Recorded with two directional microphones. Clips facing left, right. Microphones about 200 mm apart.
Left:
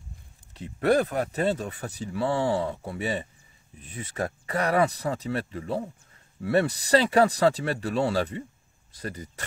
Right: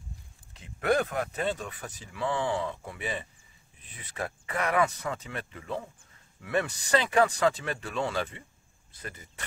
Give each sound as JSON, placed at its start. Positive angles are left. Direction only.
{"t": 0.6, "sound": "speech", "side_deg": 35}